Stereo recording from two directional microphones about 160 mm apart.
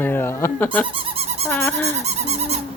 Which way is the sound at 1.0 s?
40° right (ahead or behind).